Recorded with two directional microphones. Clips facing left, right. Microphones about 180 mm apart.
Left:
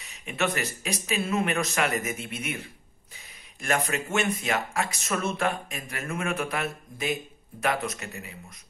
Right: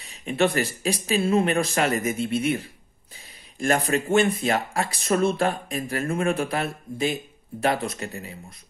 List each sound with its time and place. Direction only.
0.0 s speech: 30° right (ahead or behind)